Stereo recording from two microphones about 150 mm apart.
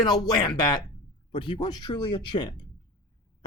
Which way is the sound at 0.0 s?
30° left (ahead or behind).